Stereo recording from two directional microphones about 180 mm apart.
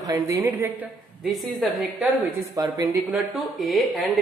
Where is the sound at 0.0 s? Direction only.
20° right (ahead or behind); by 2.0 s centre (ahead or behind).